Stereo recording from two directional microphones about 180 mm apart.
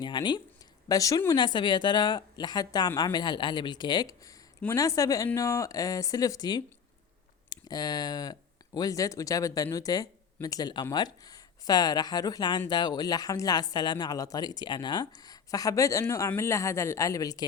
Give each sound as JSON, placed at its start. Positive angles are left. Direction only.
{"t": 0.0, "sound": "speech", "side_deg": 25}